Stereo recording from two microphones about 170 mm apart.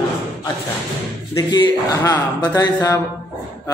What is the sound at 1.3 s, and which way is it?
Speech, 25° left (ahead or behind).